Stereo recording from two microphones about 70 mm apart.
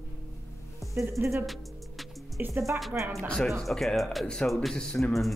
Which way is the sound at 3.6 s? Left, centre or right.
Centre.